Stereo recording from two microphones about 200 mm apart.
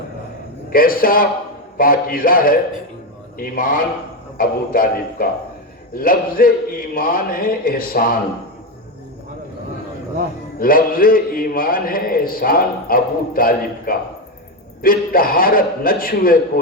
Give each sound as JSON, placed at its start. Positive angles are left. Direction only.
{"t": 0.7, "sound": "a man's voice", "side_deg": 45}
{"t": 10.6, "sound": "a man's voice", "side_deg": 45}